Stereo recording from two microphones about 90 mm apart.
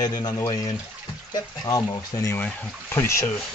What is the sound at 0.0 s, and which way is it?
Speech, 45° left (ahead or behind).